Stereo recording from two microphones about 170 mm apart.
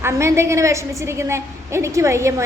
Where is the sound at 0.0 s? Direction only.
15° right (ahead or behind).